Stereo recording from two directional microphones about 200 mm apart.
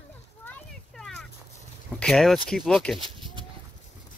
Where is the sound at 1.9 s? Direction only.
Centre (ahead or behind).